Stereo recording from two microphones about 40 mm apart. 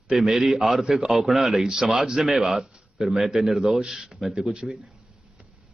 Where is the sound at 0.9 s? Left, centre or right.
Centre.